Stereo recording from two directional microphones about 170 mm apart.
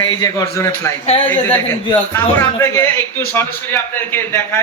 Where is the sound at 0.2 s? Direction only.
20° left (ahead or behind).